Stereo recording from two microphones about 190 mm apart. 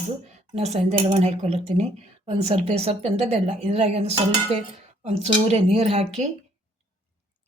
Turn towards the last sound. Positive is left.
turn(degrees=-30)  # may be behind; listen again after turning